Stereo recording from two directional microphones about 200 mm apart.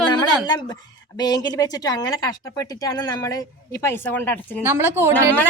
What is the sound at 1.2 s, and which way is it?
Speech, 20° left (ahead or behind).